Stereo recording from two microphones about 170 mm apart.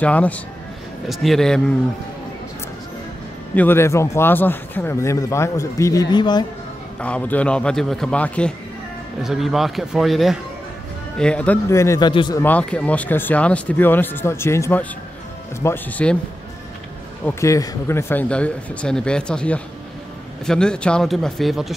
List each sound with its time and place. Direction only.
0.0 s a man's voice: 10° left (ahead or behind)
3.5 s a man's voice: 15° left (ahead or behind)
7.0 s a man's voice: 10° left (ahead or behind)
12.1 s speech: 30° left (ahead or behind)
12.4 s a man's voice: 10° left (ahead or behind)
17.2 s a man's voice: 20° left (ahead or behind); by 21.7 s centre (ahead or behind)